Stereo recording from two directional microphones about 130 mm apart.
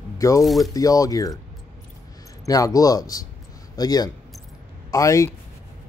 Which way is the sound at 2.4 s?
25° left (ahead or behind).